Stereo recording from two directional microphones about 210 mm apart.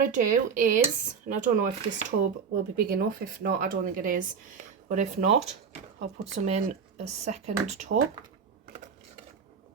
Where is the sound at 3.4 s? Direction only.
40° right (ahead or behind).